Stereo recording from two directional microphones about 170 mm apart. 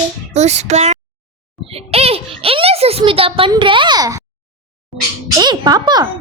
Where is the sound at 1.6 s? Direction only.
35° right (ahead or behind).